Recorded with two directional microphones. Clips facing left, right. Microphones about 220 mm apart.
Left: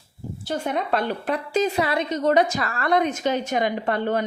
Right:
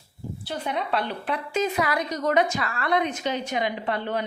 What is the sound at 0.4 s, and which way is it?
A woman's voice, 45° left (ahead or behind).